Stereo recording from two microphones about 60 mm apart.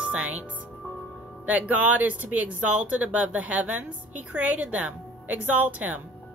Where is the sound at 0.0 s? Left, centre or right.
Right.